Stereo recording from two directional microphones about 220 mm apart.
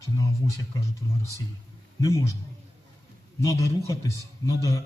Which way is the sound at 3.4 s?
15° left (ahead or behind).